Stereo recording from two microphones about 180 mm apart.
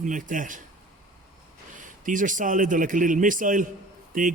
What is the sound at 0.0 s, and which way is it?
Speech, 45° right (ahead or behind).